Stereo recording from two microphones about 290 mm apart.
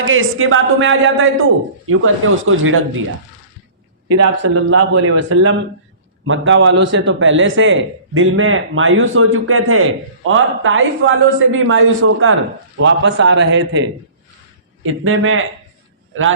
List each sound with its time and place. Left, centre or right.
0.0 s a man's voice: right
4.1 s a man's voice: right
15.0 s a man's voice: right